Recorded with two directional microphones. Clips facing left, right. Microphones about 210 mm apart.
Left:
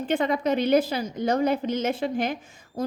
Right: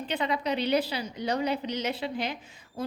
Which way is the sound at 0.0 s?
50° left (ahead or behind).